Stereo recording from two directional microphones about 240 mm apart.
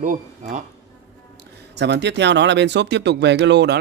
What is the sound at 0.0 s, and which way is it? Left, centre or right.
Speech, right.